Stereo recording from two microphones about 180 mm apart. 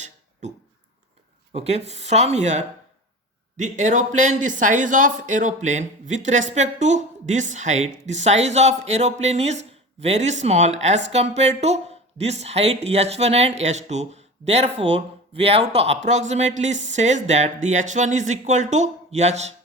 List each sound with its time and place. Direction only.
1.5 s speech: 35° right (ahead or behind)